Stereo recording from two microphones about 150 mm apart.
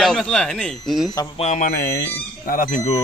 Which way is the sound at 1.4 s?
60° left (ahead or behind).